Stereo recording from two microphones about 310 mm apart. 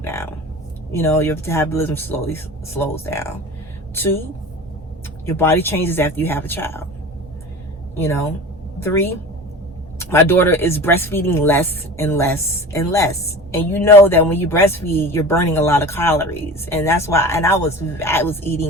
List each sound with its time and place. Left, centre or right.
0.0 s a woman's voice: centre
5.2 s speech: centre
7.9 s speech: centre